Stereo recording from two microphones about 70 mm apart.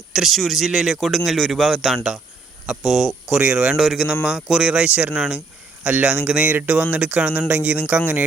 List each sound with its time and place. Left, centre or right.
0.1 s speech: centre